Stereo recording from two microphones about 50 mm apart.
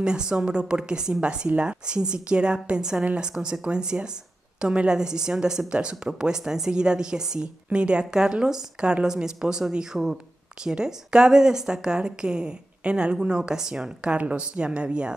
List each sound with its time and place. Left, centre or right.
0.0 s a woman's voice: centre
14.1 s speech: right